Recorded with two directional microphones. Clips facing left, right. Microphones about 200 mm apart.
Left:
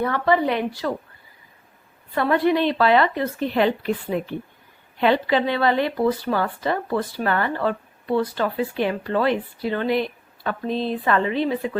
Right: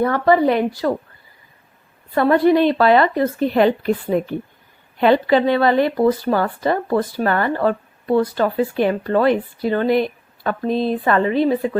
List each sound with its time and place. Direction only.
0.0 s speech: 40° right (ahead or behind)
2.1 s speech: 40° right (ahead or behind)